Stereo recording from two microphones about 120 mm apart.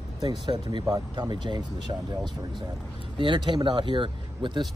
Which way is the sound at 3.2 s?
40° right (ahead or behind).